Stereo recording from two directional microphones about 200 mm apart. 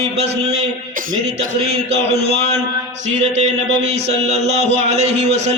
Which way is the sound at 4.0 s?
35° right (ahead or behind).